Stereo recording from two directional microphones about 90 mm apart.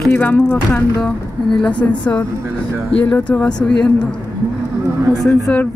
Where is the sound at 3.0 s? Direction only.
15° left (ahead or behind).